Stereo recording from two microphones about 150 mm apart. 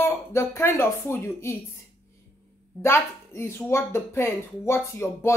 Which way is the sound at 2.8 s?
15° left (ahead or behind).